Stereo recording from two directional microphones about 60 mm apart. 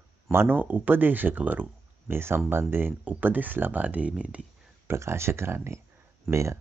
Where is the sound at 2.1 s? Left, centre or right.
Right.